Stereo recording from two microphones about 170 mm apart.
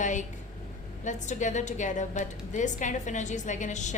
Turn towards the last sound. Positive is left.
turn(degrees=45)  # may be behind; listen again after turning